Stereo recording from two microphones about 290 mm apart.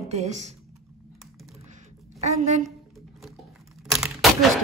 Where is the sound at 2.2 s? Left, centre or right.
Right.